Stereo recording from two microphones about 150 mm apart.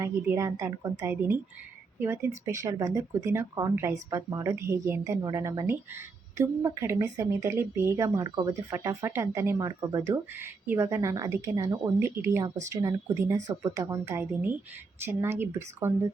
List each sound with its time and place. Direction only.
0.0 s speech: 20° right (ahead or behind)